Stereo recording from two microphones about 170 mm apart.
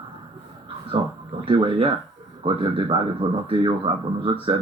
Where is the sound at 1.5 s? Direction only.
30° right (ahead or behind).